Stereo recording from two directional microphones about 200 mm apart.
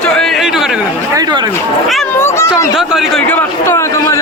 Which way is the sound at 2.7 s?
Centre (ahead or behind).